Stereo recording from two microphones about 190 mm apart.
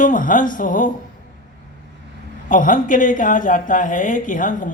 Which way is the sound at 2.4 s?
45° left (ahead or behind).